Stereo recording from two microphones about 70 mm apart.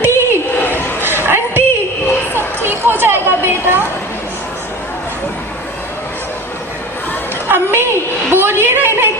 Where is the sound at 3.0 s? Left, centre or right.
Right.